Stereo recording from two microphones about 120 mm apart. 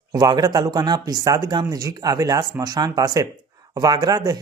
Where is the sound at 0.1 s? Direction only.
35° right (ahead or behind).